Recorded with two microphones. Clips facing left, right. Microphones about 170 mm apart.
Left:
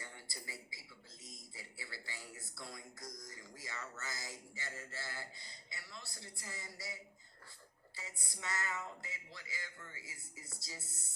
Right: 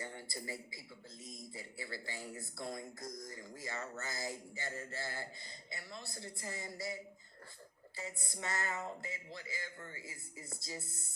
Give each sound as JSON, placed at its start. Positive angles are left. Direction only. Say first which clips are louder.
{"t": 0.0, "sound": "a sound", "louder": "right 7 dB", "side_deg": -50}
{"t": 1.2, "sound": "a man's voice", "louder": "right 7 dB", "side_deg": -50}
{"t": 7.9, "sound": "a man's voice", "louder": "right 7 dB", "side_deg": -50}